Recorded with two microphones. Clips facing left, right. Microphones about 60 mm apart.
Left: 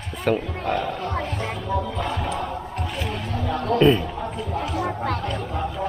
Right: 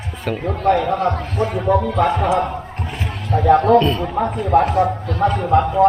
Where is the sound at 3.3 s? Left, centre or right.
Right.